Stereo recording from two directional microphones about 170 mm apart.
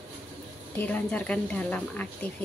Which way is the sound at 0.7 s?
10° left (ahead or behind).